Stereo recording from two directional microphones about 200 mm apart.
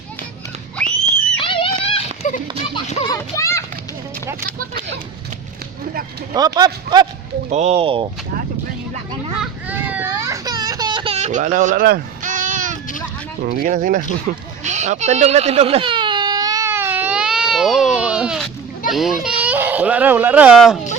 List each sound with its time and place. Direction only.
1.4 s a sound: 25° left (ahead or behind)
2.7 s music: 25° left (ahead or behind)
3.2 s a sound: 15° left (ahead or behind)
6.3 s speech: 20° right (ahead or behind)
7.5 s speech: 35° right (ahead or behind)
9.4 s baby cry: 10° right (ahead or behind); by 12.8 s 40° right (ahead or behind)
13.4 s speech: 50° right (ahead or behind)
14.3 s a sound: 40° right (ahead or behind)
14.6 s baby cry: 35° right (ahead or behind); by 18.4 s 5° right (ahead or behind)
18.9 s speech: centre (ahead or behind)